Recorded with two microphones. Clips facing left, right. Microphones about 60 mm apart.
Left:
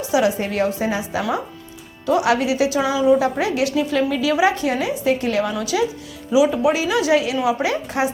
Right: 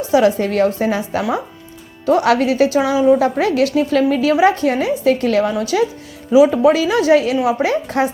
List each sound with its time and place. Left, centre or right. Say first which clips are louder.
0.1 s a woman's voice: right 5 dB; right